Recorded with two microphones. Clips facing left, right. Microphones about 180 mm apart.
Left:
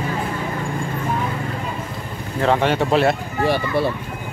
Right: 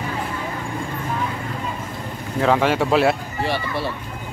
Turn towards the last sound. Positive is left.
turn(degrees=50)  # may be behind; listen again after turning